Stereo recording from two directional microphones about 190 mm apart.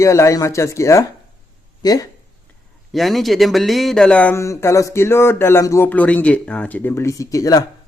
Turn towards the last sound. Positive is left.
turn(degrees=20)  # may be behind; listen again after turning